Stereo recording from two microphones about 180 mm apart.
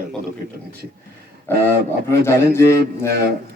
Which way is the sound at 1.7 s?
15° left (ahead or behind).